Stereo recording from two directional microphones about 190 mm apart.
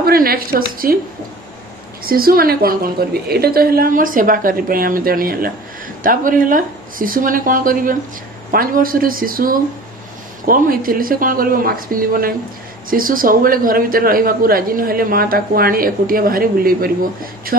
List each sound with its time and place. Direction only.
0.0 s speech: 50° right (ahead or behind)
2.0 s speech: 50° right (ahead or behind)